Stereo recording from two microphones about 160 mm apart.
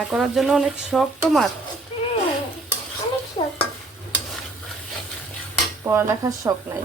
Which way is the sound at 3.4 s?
30° left (ahead or behind).